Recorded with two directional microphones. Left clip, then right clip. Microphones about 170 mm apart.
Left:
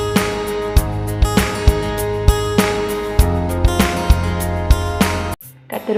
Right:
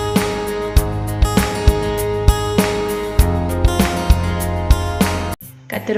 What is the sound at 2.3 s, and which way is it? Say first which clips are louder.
Music: left 1 dB; centre (ahead or behind).